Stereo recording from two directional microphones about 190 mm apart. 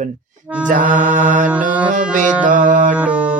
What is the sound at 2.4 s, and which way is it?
Speech, 45° right (ahead or behind).